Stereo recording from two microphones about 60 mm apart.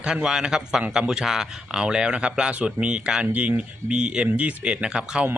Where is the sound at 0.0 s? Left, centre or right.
Centre.